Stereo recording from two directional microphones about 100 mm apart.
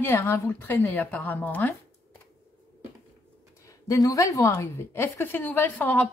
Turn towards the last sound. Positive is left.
turn(degrees=20)  # may be behind; listen again after turning